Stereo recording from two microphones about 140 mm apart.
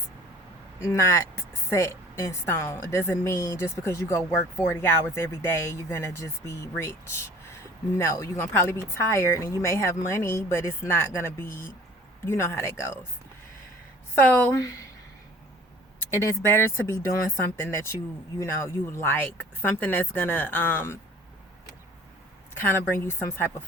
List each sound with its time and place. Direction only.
0.8 s a woman's voice: 20° left (ahead or behind)
16.0 s speech: 20° left (ahead or behind)
22.5 s speech: 15° left (ahead or behind)